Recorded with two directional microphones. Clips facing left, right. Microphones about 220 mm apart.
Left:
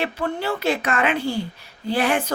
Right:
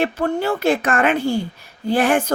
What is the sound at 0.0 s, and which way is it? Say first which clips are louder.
Speech: right 5 dB; 50° right (ahead or behind).